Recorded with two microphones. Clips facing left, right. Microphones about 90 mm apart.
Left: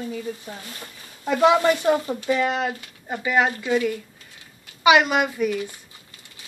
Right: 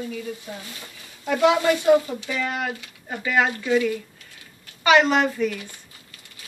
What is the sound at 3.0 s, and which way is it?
Speech, 15° left (ahead or behind).